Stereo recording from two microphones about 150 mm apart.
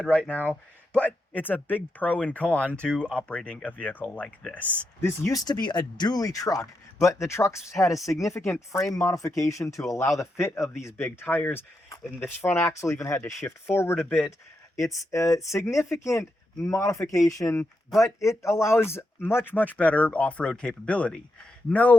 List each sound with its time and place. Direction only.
0.0 s speech: 10° left (ahead or behind)